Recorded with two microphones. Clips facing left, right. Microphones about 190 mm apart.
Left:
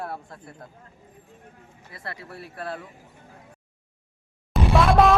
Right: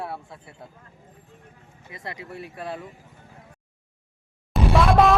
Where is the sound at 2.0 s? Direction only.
20° right (ahead or behind).